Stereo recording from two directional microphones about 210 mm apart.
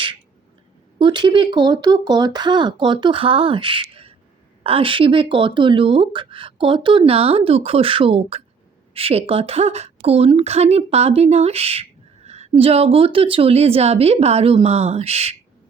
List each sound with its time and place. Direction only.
0.9 s speech: 20° right (ahead or behind)